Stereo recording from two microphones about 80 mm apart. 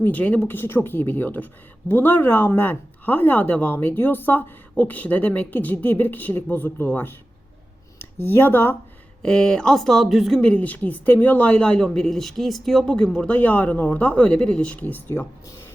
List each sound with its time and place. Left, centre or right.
0.0 s speech: centre
9.2 s speech: centre
10.4 s speech: centre